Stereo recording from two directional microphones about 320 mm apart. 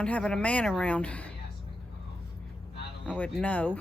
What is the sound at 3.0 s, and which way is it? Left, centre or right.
Speech, centre.